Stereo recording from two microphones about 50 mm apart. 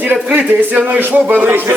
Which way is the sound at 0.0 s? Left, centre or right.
Right.